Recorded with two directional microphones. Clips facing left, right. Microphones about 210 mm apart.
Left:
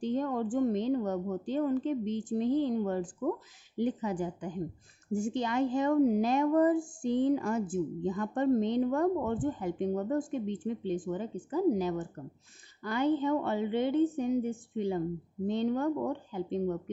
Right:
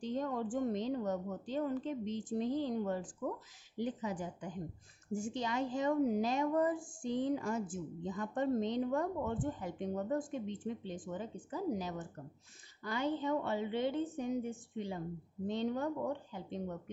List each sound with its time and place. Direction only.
0.0 s a woman's voice: 60° left (ahead or behind)